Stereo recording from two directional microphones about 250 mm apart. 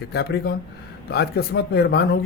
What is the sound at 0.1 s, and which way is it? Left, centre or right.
Speech, left.